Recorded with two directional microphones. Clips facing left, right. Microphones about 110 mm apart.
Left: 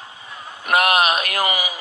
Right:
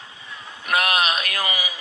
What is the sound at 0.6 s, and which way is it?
A man's voice, 40° left (ahead or behind).